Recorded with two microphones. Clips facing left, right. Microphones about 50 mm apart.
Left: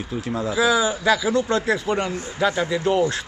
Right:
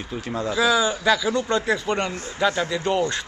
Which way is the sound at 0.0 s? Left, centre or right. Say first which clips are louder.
Left 2 dB; centre.